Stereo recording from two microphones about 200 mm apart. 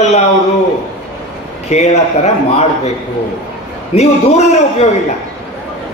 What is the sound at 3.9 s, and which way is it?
Speech, 35° left (ahead or behind).